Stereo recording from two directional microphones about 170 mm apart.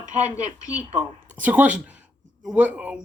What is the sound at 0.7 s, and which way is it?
Speech, 10° right (ahead or behind).